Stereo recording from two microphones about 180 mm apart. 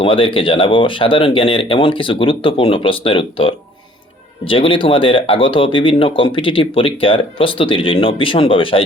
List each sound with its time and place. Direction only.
0.0 s speech: 30° left (ahead or behind)